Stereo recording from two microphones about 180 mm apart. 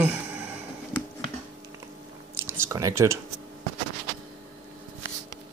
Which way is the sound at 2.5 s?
15° right (ahead or behind).